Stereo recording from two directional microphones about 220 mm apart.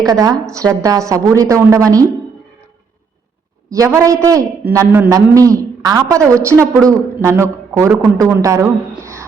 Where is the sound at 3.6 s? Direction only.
15° right (ahead or behind).